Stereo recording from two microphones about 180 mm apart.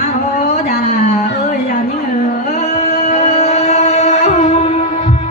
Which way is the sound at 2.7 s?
40° left (ahead or behind).